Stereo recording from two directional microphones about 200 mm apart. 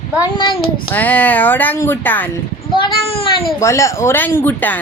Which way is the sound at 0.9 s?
10° left (ahead or behind).